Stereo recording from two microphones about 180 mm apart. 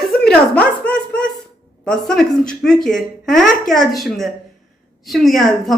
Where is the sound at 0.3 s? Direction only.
5° left (ahead or behind).